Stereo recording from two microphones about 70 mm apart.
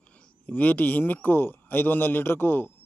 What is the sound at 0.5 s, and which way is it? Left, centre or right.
A man's voice, left.